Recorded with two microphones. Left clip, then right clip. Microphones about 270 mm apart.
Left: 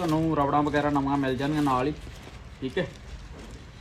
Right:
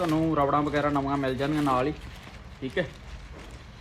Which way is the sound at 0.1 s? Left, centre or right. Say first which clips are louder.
Left 2 dB; centre.